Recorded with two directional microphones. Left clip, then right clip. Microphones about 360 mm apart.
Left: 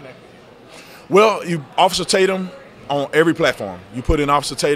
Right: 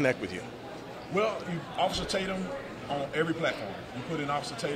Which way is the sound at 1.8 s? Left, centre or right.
Left.